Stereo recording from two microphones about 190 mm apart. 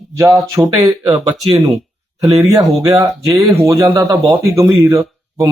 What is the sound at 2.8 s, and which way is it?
Speech, 15° right (ahead or behind).